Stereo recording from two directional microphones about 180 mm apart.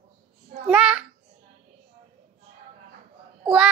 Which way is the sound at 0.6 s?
5° right (ahead or behind).